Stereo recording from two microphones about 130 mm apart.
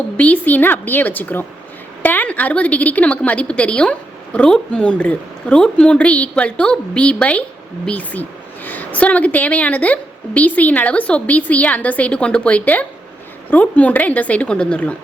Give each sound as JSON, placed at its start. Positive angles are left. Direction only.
{"t": 0.2, "sound": "a woman's voice", "side_deg": 10}